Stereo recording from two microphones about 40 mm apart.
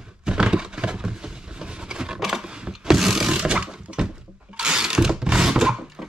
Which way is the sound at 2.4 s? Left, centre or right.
Right.